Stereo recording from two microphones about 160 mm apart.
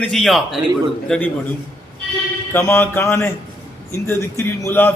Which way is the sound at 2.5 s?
15° left (ahead or behind).